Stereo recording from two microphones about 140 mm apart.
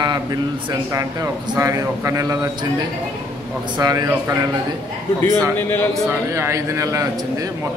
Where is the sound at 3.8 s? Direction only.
30° right (ahead or behind).